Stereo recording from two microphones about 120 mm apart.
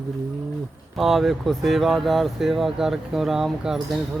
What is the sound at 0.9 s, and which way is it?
Speech, centre (ahead or behind).